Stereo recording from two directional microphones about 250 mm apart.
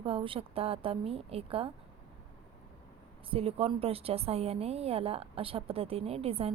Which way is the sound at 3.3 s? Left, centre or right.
Right.